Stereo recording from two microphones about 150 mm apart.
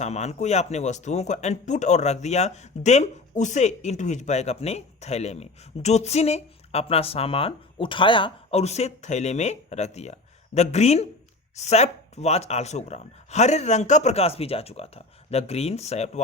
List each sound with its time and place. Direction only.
0.0 s speech: 50° left (ahead or behind)